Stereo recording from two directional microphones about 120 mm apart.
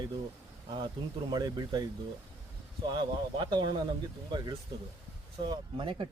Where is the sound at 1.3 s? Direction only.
35° right (ahead or behind).